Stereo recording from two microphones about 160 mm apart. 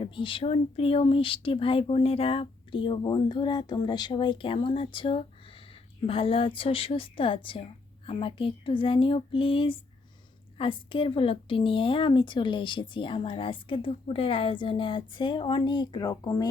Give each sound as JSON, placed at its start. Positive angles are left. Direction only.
{"t": 0.0, "sound": "a woman's voice", "side_deg": 30}